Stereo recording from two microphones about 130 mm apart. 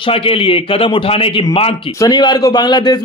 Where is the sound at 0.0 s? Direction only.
45° left (ahead or behind).